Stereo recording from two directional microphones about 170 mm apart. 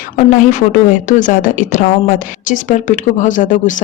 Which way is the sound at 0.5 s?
50° left (ahead or behind).